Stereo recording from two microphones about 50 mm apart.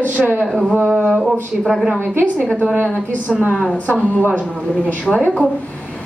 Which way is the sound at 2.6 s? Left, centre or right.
Right.